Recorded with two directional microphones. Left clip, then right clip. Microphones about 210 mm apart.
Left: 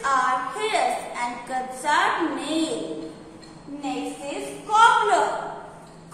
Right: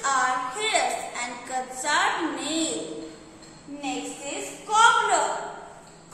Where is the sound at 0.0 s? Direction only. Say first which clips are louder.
Left 2 dB; 20° right (ahead or behind).